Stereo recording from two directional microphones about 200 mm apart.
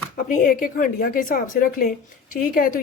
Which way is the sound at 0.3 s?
45° left (ahead or behind).